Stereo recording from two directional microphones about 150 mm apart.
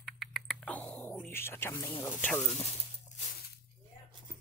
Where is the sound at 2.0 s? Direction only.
10° left (ahead or behind).